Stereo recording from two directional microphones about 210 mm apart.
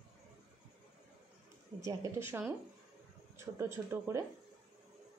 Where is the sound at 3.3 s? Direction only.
10° right (ahead or behind).